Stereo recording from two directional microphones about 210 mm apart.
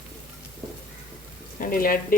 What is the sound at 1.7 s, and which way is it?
Speech, 45° left (ahead or behind).